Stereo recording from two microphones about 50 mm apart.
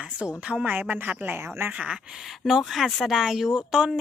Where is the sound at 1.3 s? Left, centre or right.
Right.